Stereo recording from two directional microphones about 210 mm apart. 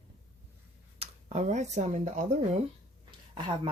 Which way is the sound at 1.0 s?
30° right (ahead or behind).